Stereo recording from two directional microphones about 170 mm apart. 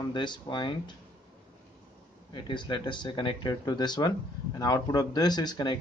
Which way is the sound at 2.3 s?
30° left (ahead or behind).